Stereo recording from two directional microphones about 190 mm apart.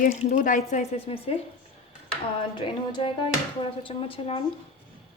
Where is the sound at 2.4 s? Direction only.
25° left (ahead or behind).